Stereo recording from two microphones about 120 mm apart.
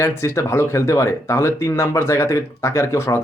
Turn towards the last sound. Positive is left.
turn(degrees=25)  # may be behind; listen again after turning